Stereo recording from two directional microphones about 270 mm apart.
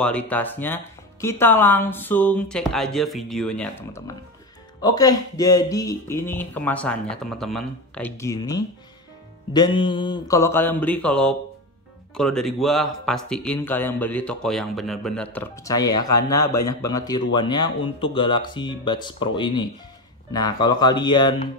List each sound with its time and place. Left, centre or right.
0.0 s a man's voice: centre